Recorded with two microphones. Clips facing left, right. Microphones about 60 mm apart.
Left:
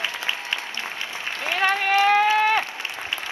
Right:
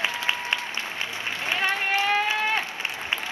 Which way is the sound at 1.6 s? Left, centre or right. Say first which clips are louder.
Left 6 dB; left.